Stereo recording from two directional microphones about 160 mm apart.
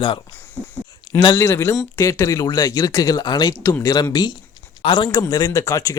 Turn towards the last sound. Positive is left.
turn(degrees=20)  # may be behind; listen again after turning